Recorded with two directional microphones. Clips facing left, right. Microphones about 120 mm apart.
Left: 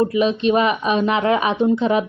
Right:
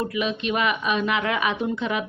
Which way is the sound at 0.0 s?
35° left (ahead or behind).